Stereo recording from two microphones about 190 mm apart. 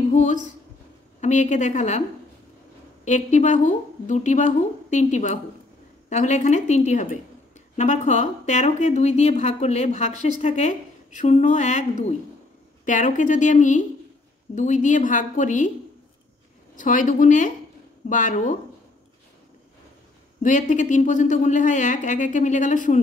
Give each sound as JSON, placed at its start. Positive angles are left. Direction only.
{"t": 0.1, "sound": "a woman's voice", "side_deg": 40}
{"t": 3.1, "sound": "a woman's voice", "side_deg": 40}
{"t": 16.7, "sound": "a woman's voice", "side_deg": 45}
{"t": 20.4, "sound": "a woman's voice", "side_deg": 40}